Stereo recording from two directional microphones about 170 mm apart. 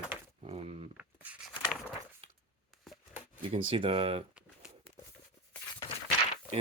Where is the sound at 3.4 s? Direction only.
30° right (ahead or behind).